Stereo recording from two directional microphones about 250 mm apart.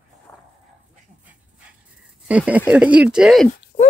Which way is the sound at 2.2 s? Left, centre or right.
Centre.